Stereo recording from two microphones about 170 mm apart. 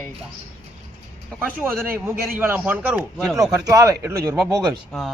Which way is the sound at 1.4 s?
10° right (ahead or behind).